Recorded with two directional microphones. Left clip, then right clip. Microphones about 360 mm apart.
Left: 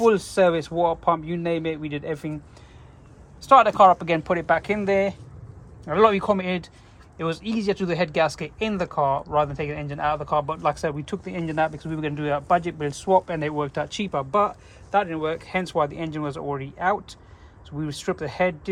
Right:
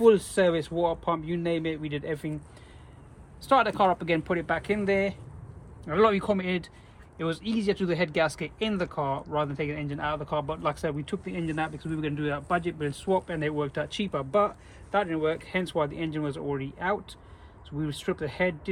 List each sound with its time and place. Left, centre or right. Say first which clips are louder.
0.0 s speech: left 2 dB; left
3.5 s speech: left 8 dB; left